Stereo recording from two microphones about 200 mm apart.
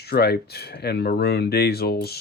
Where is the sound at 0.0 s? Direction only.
55° left (ahead or behind).